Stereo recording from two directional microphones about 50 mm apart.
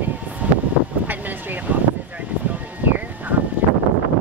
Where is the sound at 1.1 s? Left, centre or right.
Right.